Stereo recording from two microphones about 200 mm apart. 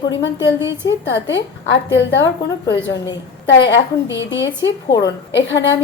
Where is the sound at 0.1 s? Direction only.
65° left (ahead or behind).